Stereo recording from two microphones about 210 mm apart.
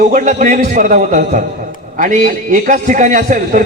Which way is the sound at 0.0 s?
40° right (ahead or behind).